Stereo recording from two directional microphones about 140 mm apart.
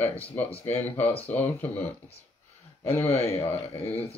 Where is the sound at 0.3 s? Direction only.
15° left (ahead or behind).